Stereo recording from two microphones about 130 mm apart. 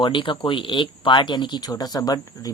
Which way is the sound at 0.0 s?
40° left (ahead or behind).